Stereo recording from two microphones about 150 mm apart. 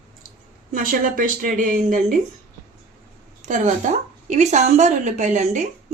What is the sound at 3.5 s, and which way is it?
A woman's voice, 55° right (ahead or behind).